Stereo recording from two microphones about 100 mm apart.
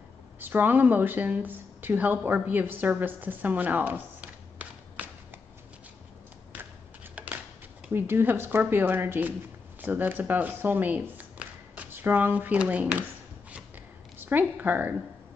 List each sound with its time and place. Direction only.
0.4 s a woman's voice: 20° right (ahead or behind)
7.2 s a sound: 15° right (ahead or behind)
7.9 s speech: 20° right (ahead or behind)
14.1 s speech: 20° right (ahead or behind)